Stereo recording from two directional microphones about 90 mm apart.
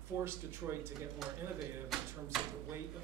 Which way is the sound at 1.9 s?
Centre (ahead or behind).